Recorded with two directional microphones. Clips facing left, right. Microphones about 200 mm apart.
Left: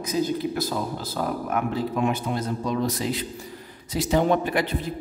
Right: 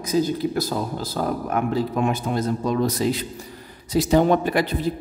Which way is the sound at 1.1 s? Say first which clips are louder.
Right 2 dB; 40° right (ahead or behind).